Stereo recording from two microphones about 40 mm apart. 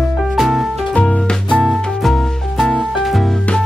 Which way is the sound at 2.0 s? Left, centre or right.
Centre.